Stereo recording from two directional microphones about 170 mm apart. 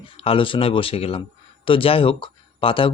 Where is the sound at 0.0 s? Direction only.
30° left (ahead or behind).